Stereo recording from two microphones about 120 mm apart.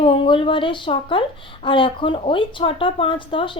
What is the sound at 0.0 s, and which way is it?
A woman's voice, 45° left (ahead or behind).